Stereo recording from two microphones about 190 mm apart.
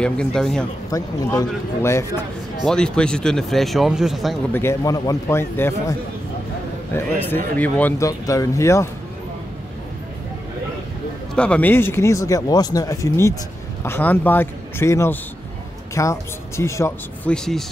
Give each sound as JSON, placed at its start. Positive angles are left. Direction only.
{"t": 0.0, "sound": "speech", "side_deg": 5}
{"t": 0.8, "sound": "speech", "side_deg": 20}
{"t": 2.6, "sound": "speech", "side_deg": 5}
{"t": 4.5, "sound": "speech", "side_deg": 10}
{"t": 11.3, "sound": "speech", "side_deg": 5}